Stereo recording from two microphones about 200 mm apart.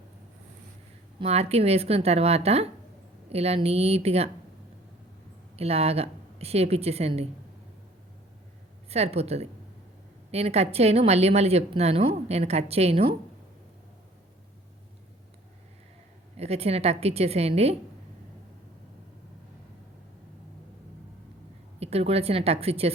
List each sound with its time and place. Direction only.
1.2 s a woman's voice: 30° right (ahead or behind)
5.5 s a woman's voice: 30° right (ahead or behind)
8.9 s a woman's voice: 30° right (ahead or behind)
16.4 s a woman's voice: 30° right (ahead or behind)
21.8 s a woman's voice: 30° right (ahead or behind)